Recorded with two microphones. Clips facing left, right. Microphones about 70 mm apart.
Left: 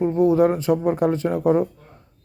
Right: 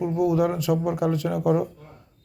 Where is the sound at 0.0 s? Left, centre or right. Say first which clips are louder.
Left 5 dB; left.